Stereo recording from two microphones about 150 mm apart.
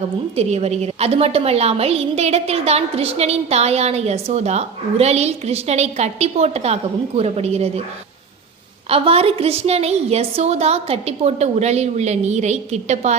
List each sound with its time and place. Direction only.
0.3 s a woman's voice: 45° right (ahead or behind)
8.9 s a woman's voice: 40° right (ahead or behind)